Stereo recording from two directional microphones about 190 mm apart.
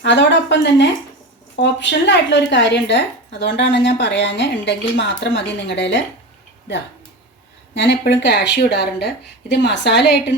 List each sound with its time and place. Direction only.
0.0 s a woman's voice: 70° left (ahead or behind)
7.7 s a woman's voice: 65° left (ahead or behind)